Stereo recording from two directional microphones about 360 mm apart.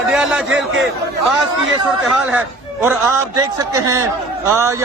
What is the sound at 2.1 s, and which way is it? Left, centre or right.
A man's voice, centre.